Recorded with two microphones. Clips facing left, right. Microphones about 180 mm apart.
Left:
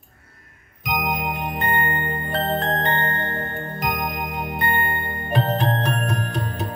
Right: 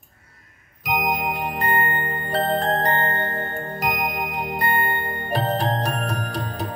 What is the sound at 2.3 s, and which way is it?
Music, 35° right (ahead or behind).